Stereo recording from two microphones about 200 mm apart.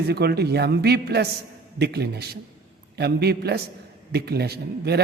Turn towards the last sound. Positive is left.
turn(degrees=-55)  # may be behind; listen again after turning